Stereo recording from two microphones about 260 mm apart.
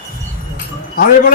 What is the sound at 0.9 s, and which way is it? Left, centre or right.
Speech, left.